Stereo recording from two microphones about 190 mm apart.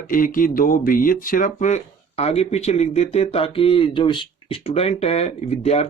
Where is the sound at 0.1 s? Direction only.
45° left (ahead or behind).